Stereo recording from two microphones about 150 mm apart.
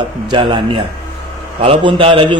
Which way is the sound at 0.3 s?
30° right (ahead or behind).